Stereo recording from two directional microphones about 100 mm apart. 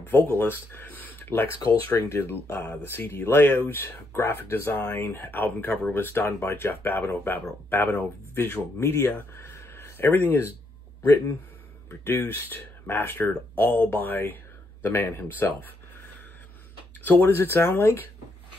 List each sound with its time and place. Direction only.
0.0 s speech: 20° left (ahead or behind)
12.0 s speech: 20° left (ahead or behind)
17.0 s speech: 20° left (ahead or behind)